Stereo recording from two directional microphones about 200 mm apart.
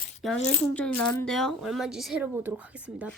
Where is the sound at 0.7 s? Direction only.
5° left (ahead or behind).